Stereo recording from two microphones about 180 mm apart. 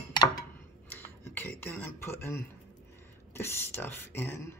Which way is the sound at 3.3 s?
15° left (ahead or behind).